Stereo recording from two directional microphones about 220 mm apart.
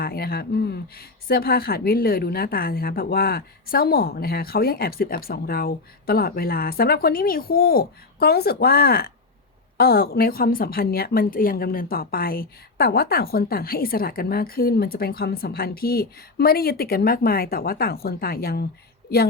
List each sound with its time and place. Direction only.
0.0 s speech: 45° left (ahead or behind)